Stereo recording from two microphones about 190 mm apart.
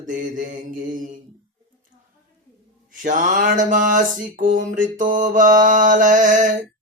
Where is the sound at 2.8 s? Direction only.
45° right (ahead or behind).